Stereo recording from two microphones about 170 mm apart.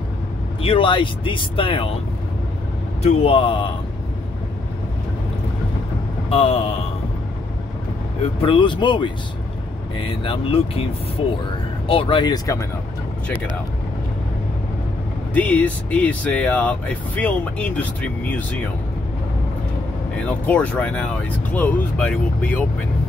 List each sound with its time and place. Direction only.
0.6 s speech: 30° left (ahead or behind)
3.0 s speech: 30° left (ahead or behind)
6.3 s speech: 35° left (ahead or behind)
8.2 s speech: 30° left (ahead or behind)
15.3 s speech: 10° left (ahead or behind)
20.2 s speech: 5° left (ahead or behind)